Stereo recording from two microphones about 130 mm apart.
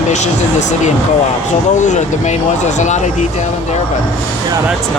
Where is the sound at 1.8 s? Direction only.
65° left (ahead or behind).